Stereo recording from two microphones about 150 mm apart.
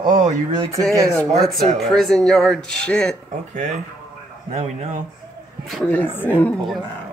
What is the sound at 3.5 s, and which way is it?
Speech, 60° right (ahead or behind).